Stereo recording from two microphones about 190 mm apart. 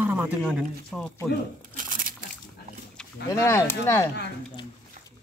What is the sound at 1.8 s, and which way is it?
Crumpling, 45° right (ahead or behind).